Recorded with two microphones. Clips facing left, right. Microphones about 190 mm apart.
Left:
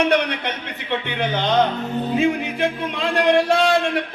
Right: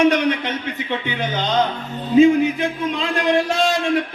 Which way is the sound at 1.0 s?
60° left (ahead or behind).